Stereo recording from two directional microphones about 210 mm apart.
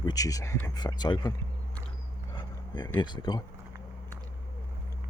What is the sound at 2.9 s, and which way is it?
Speech, 20° left (ahead or behind).